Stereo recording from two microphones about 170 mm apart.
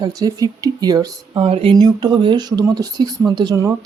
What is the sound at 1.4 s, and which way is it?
Speech, 35° right (ahead or behind).